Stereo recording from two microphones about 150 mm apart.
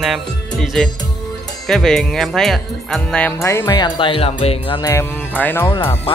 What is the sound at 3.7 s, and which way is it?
Speech, 30° left (ahead or behind).